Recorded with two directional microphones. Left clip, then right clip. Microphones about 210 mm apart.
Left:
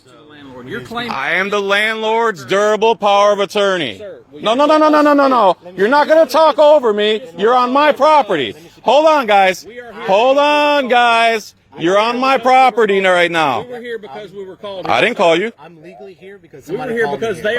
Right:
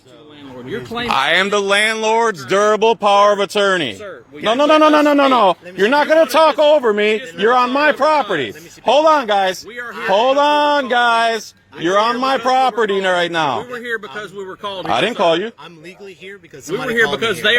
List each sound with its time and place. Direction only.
0.7 s a man's voice: centre (ahead or behind)
1.0 s a man's voice: 15° right (ahead or behind); by 9.6 s 30° left (ahead or behind)
9.7 s a man's voice: centre (ahead or behind)
10.5 s a man's voice: 25° left (ahead or behind)
13.7 s a man's voice: centre (ahead or behind)
14.8 s a man's voice: 25° left (ahead or behind)
16.6 s a man's voice: centre (ahead or behind)